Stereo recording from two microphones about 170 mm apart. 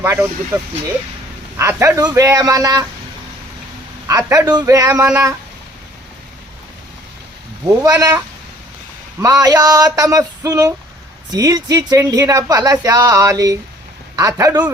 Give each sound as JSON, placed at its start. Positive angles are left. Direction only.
{"t": 0.0, "sound": "speech", "side_deg": -15}
{"t": 4.1, "sound": "speech", "side_deg": -20}
{"t": 7.8, "sound": "speech", "side_deg": -20}
{"t": 9.2, "sound": "speech", "side_deg": -20}